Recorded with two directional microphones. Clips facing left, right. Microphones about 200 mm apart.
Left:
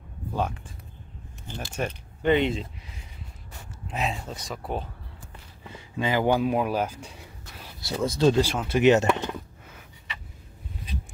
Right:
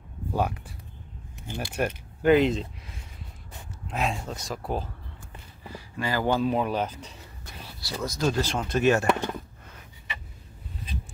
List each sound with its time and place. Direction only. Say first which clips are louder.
0.3 s speech: right 1 dB; 10° right (ahead or behind)
5.7 s speech: left 3 dB; 20° left (ahead or behind)
7.8 s speech: left 6 dB; 25° left (ahead or behind)
8.4 s speech: left 3 dB; 10° left (ahead or behind)
8.8 s speech: left 3 dB; 20° left (ahead or behind)